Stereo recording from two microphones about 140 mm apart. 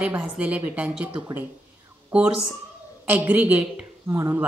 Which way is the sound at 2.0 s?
10° right (ahead or behind).